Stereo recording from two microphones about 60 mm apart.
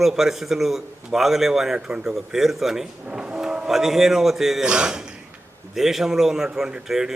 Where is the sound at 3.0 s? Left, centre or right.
Centre.